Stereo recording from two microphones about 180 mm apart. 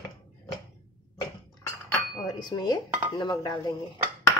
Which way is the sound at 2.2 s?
20° left (ahead or behind).